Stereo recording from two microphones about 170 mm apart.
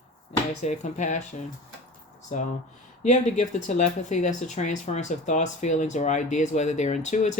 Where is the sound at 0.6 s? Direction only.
45° left (ahead or behind).